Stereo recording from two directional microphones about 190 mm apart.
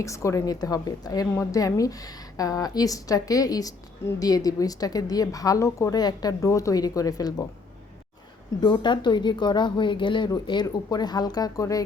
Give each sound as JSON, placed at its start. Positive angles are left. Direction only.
{"t": 0.0, "sound": "a woman's voice", "side_deg": 15}
{"t": 8.6, "sound": "a woman's voice", "side_deg": 25}